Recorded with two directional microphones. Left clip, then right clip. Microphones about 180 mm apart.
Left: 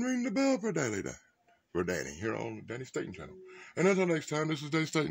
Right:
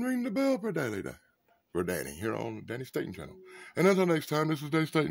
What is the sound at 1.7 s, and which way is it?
Speech, 5° right (ahead or behind).